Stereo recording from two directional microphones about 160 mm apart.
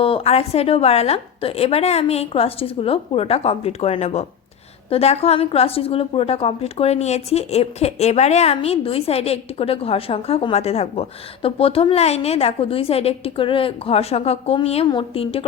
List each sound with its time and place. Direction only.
0.0 s a woman's voice: 40° left (ahead or behind)